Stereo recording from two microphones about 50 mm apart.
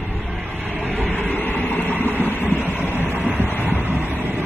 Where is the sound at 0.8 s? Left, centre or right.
Left.